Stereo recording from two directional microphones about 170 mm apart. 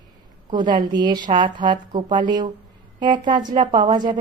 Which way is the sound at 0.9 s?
25° right (ahead or behind).